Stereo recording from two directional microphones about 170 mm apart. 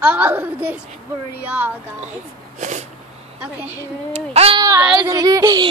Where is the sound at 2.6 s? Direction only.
45° right (ahead or behind).